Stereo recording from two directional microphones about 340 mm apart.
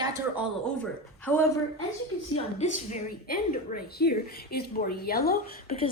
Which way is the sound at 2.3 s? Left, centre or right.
Centre.